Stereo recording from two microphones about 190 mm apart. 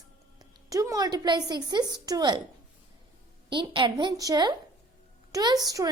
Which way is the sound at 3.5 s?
25° right (ahead or behind).